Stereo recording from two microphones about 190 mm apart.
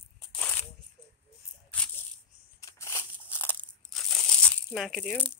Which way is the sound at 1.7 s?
10° left (ahead or behind).